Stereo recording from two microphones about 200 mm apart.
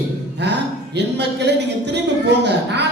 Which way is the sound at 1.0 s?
60° right (ahead or behind).